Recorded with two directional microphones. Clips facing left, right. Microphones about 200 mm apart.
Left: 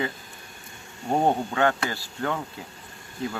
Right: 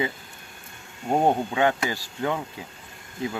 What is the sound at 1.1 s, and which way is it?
Speech, 15° right (ahead or behind).